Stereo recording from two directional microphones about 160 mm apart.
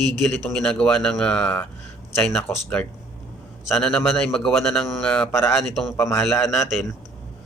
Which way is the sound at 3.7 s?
5° left (ahead or behind).